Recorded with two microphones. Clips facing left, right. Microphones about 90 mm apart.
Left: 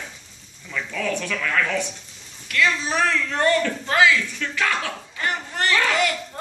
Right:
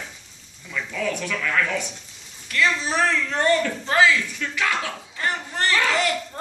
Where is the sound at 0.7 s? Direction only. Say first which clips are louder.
Even; 10° right (ahead or behind).